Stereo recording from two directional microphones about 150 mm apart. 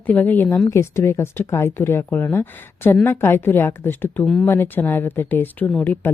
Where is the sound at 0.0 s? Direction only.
10° left (ahead or behind).